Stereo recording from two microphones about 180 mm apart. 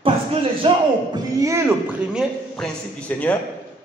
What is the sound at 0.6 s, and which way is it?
A man's voice, 20° right (ahead or behind).